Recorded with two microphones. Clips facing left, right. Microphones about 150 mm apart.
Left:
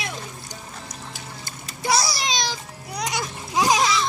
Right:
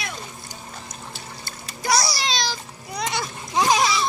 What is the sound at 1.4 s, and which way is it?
Splash, 25° left (ahead or behind).